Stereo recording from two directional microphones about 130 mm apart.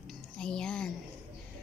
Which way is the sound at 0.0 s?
5° left (ahead or behind).